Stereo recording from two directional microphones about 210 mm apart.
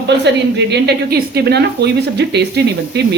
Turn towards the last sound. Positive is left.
turn(degrees=-55)  # may be behind; listen again after turning